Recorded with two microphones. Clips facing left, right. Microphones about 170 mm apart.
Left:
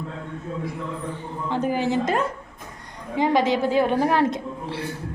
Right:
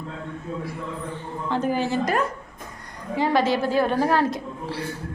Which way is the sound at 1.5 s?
15° left (ahead or behind).